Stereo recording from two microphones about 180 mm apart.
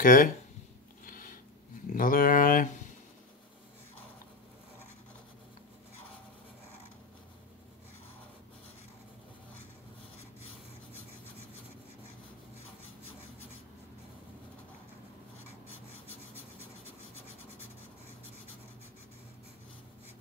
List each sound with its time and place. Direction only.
0.0 s speech: 50° left (ahead or behind)
1.0 s a sound: 50° left (ahead or behind)
1.9 s speech: 50° left (ahead or behind)